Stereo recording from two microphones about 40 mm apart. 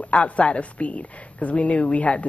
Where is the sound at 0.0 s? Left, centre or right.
Left.